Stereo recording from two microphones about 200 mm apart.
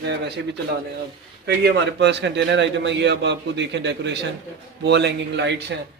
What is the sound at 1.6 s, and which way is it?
Speech, 60° right (ahead or behind).